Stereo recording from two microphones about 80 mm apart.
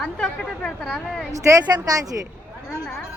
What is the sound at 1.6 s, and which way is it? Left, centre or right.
Speech, right.